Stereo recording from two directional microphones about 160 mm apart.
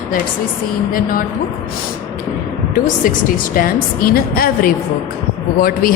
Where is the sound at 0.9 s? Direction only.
60° left (ahead or behind).